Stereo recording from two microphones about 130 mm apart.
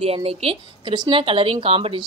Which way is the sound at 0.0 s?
50° right (ahead or behind).